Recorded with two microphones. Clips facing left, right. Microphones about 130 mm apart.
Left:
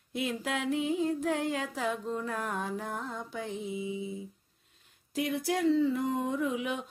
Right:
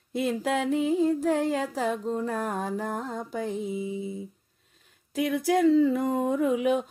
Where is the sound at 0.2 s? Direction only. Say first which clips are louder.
Right 6 dB; 40° right (ahead or behind).